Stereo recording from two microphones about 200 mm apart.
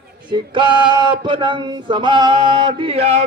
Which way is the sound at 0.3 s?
25° right (ahead or behind).